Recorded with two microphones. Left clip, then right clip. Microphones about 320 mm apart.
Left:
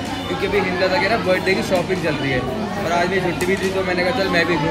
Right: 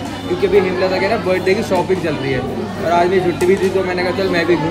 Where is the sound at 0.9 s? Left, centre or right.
Centre.